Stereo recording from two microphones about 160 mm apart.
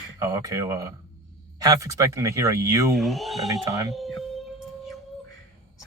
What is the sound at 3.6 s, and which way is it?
Speech, 20° right (ahead or behind).